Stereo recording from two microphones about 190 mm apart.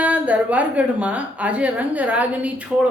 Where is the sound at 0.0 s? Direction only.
10° right (ahead or behind).